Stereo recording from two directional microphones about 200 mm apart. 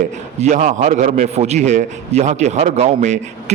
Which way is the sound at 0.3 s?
35° right (ahead or behind).